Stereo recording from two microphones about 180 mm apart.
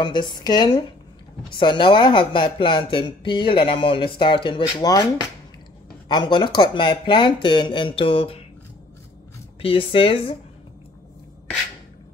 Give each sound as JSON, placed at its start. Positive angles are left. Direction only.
{"t": 0.0, "sound": "speech", "side_deg": 25}
{"t": 6.0, "sound": "speech", "side_deg": 25}
{"t": 9.6, "sound": "speech", "side_deg": 30}